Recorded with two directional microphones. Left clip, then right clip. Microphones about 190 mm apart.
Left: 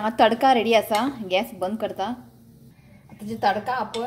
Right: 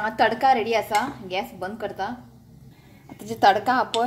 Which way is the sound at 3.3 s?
35° right (ahead or behind).